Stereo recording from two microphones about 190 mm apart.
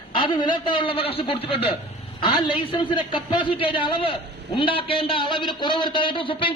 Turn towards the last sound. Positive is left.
turn(degrees=25)  # may be behind; listen again after turning